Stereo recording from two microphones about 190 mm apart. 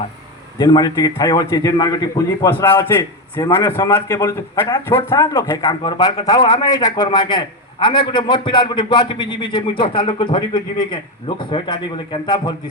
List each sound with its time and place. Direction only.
0.6 s a man's voice: 20° left (ahead or behind)